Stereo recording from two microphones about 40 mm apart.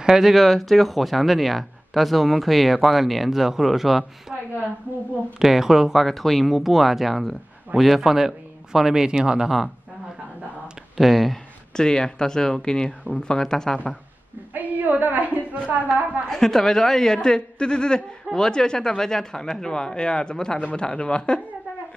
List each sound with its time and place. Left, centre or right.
0.0 s speech: centre
5.4 s speech: centre
11.0 s speech: centre
11.7 s speech: centre
14.5 s a sound: right
15.7 s a woman's voice: right
16.3 s speech: centre